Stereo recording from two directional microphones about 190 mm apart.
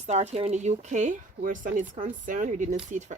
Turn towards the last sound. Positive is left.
turn(degrees=-40)  # may be behind; listen again after turning